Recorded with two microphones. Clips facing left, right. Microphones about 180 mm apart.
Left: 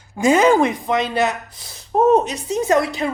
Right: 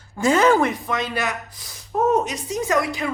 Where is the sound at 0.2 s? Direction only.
15° left (ahead or behind).